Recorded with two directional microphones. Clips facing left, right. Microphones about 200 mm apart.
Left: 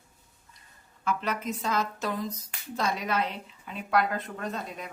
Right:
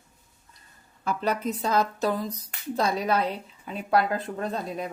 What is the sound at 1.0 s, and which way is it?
A woman's voice, 35° right (ahead or behind).